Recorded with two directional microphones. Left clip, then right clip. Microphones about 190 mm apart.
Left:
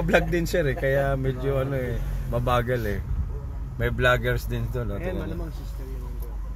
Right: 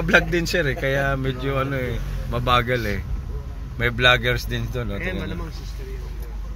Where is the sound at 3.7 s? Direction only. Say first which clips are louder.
Right 5 dB; 5° left (ahead or behind).